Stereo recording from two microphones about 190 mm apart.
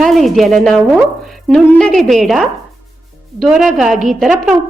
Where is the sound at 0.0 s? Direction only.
Centre (ahead or behind).